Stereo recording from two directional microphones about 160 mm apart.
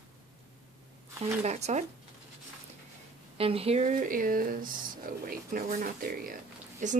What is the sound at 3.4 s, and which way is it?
Speech, 35° right (ahead or behind).